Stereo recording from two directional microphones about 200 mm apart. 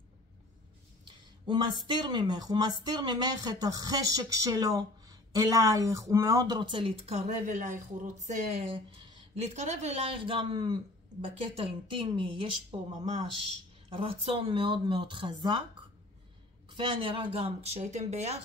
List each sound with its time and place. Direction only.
1.5 s speech: 25° right (ahead or behind)
13.8 s speech: 25° right (ahead or behind)
16.7 s speech: 25° right (ahead or behind)